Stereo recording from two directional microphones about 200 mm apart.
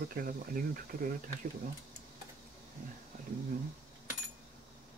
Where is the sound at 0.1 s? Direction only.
45° right (ahead or behind).